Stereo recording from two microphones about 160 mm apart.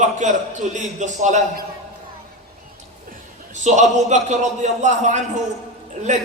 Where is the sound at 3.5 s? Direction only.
50° right (ahead or behind).